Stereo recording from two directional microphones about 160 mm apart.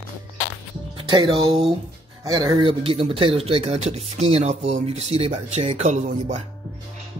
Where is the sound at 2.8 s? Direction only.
35° right (ahead or behind).